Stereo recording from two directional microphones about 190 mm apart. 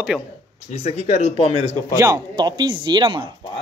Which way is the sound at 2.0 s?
20° right (ahead or behind).